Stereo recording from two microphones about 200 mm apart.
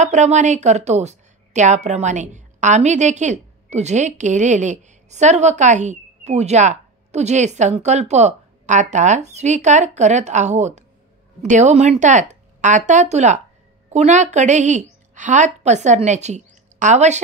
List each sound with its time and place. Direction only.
0.0 s a woman's voice: 35° right (ahead or behind)